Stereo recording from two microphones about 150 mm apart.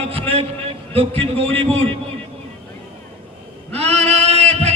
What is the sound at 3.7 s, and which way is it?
Male singing, 45° right (ahead or behind).